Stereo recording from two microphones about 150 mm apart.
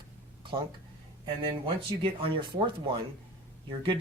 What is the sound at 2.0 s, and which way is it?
Speech, 35° right (ahead or behind).